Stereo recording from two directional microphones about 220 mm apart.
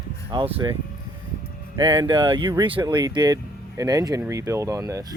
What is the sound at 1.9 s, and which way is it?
Speech, 20° right (ahead or behind).